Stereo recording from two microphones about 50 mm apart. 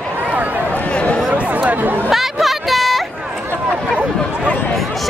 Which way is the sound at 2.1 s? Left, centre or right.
Centre.